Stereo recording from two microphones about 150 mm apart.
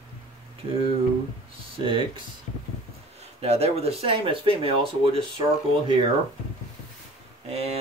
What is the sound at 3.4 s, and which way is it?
Speech, 45° right (ahead or behind).